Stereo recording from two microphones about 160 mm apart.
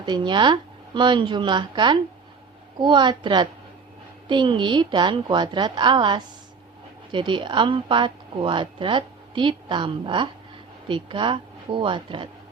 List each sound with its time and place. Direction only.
0.0 s a woman's voice: 30° right (ahead or behind)